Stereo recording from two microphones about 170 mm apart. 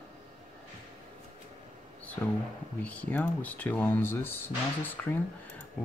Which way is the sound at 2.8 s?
10° left (ahead or behind).